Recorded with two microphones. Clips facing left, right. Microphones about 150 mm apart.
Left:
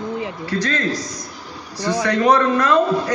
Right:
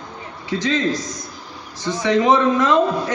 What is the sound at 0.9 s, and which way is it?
Speech, 50° right (ahead or behind).